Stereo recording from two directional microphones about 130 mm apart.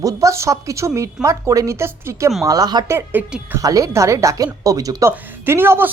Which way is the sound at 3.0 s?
15° right (ahead or behind).